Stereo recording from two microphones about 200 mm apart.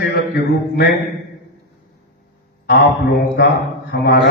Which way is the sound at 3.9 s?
55° left (ahead or behind).